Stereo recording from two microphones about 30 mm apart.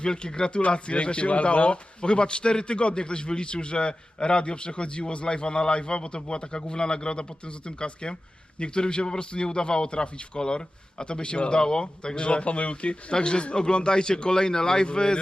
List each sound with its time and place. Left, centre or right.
0.0 s speech: left
13.1 s speech: left